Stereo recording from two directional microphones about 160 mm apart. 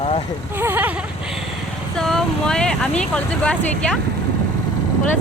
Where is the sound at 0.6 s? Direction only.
10° right (ahead or behind).